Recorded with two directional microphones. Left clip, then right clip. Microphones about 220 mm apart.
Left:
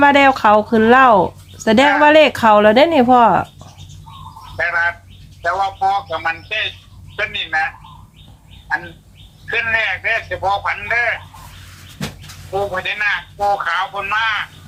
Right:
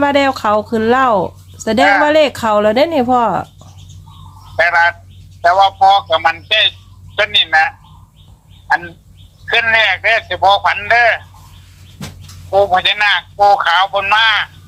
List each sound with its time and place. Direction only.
0.0 s speech: 5° left (ahead or behind)
4.5 s bird: 45° right (ahead or behind)
5.4 s a man's voice: 45° right (ahead or behind)
9.5 s a man's voice: 45° right (ahead or behind)
12.5 s a man's voice: 45° right (ahead or behind)